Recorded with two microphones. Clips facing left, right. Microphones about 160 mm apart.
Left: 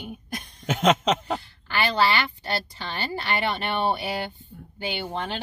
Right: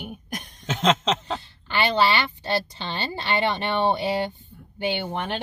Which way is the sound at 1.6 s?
20° right (ahead or behind).